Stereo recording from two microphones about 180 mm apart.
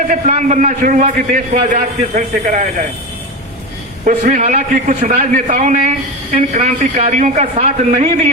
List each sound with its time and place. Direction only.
0.1 s a man's voice: 40° right (ahead or behind)
4.0 s a man's voice: 40° right (ahead or behind)